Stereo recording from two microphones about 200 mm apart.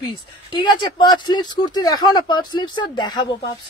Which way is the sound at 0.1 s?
20° left (ahead or behind).